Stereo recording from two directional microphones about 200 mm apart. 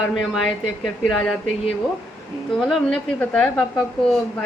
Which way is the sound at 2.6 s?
Centre (ahead or behind).